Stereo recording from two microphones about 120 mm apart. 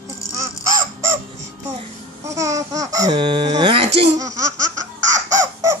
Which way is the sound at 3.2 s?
45° right (ahead or behind).